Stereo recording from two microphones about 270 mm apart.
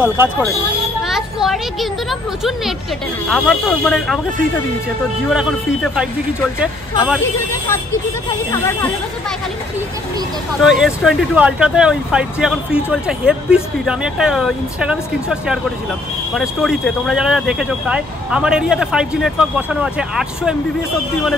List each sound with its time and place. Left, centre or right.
0.0 s speech: centre
5.3 s speech: centre
8.3 s speech: centre
10.6 s speech: centre